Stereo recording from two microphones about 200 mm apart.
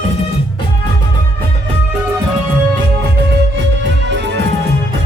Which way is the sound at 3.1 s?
65° right (ahead or behind).